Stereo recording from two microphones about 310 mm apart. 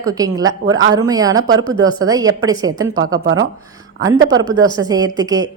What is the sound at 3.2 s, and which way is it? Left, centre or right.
Speech, right.